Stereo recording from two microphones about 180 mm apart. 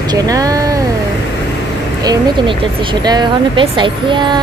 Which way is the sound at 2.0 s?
20° right (ahead or behind).